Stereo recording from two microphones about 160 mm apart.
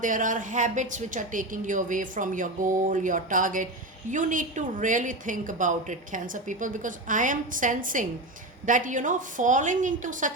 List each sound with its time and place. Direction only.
0.0 s a woman's voice: 55° right (ahead or behind)